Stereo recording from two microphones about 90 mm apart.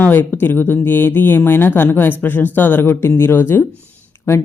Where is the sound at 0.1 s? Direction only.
20° left (ahead or behind).